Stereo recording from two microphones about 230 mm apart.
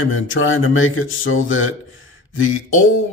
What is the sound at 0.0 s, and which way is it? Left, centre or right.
Speech, left.